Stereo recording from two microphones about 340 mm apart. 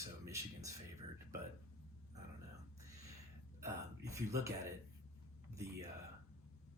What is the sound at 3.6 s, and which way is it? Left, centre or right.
Speech, centre.